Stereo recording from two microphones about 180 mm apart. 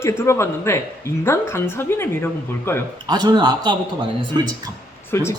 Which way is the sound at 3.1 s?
25° right (ahead or behind).